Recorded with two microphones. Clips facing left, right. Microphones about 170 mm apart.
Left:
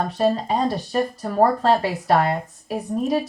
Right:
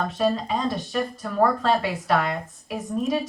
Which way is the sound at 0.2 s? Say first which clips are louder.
Left 4 dB; 35° left (ahead or behind).